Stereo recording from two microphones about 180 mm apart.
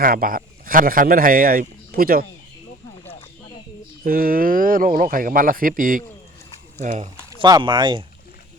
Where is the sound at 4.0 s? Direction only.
55° right (ahead or behind).